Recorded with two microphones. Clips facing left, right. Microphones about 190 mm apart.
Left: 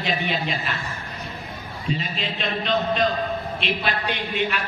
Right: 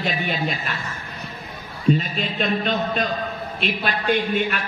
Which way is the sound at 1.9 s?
45° right (ahead or behind).